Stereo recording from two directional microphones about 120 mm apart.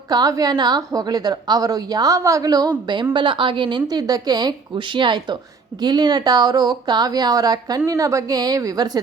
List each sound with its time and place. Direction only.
0.1 s a woman's voice: 30° right (ahead or behind)